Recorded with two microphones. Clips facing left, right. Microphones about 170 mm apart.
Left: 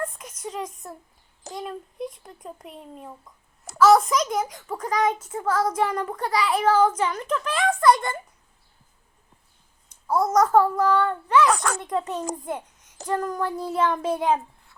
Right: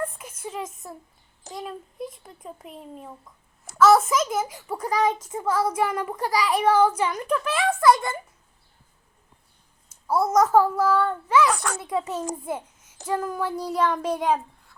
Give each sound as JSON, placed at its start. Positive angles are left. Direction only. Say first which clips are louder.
{"t": 0.2, "sound": "a sound", "louder": "left 1 dB", "side_deg": -5}
{"t": 1.5, "sound": "a child's voice", "louder": "left 1 dB", "side_deg": 0}
{"t": 9.9, "sound": "a child's voice", "louder": "even", "side_deg": -10}
{"t": 11.4, "sound": "a child's voice", "louder": "left 2 dB", "side_deg": 80}
{"t": 11.8, "sound": "a child's voice", "louder": "even", "side_deg": -5}